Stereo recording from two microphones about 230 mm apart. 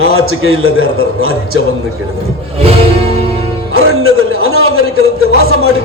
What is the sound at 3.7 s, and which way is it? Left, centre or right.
A man's voice, right.